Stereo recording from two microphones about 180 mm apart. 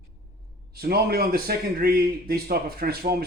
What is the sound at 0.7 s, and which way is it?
A man's voice, 60° right (ahead or behind).